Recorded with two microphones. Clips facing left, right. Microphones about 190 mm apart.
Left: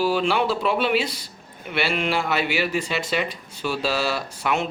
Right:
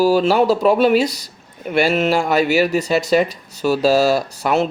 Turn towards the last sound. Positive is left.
turn(degrees=-40)  # may be behind; listen again after turning